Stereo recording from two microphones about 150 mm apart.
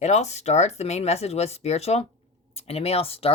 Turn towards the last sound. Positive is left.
turn(degrees=40)  # may be behind; listen again after turning